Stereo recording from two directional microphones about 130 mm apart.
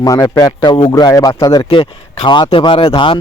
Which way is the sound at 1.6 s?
40° left (ahead or behind).